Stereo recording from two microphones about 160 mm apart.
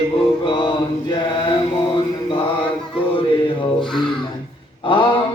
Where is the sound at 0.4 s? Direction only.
30° left (ahead or behind).